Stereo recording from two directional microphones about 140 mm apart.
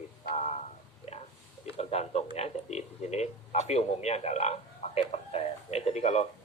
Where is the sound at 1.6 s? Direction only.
50° left (ahead or behind).